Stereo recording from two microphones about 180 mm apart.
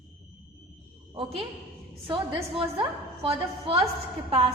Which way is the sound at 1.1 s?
30° right (ahead or behind).